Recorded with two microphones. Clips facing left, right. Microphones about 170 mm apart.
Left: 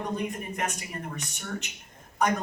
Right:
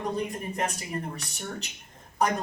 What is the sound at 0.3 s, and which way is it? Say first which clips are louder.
Speech: right 1 dB; 35° right (ahead or behind).